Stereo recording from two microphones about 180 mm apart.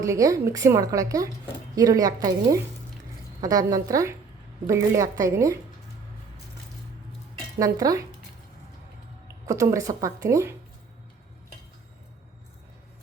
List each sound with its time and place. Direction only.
0.0 s a woman's voice: 20° right (ahead or behind)
7.6 s a woman's voice: 20° right (ahead or behind)
9.2 s speech: 15° right (ahead or behind)